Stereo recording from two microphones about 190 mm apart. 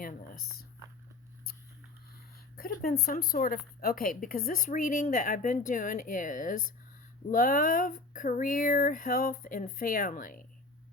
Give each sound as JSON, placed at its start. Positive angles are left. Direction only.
{"t": 2.6, "sound": "speech", "side_deg": 50}